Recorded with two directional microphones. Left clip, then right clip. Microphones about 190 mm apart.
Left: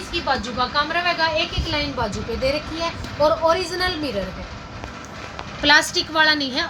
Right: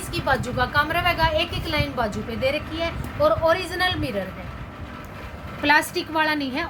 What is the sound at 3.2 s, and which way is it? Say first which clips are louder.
Speech: left 2 dB; 25° left (ahead or behind).